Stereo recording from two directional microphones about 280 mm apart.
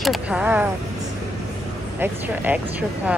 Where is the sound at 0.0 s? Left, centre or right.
Centre.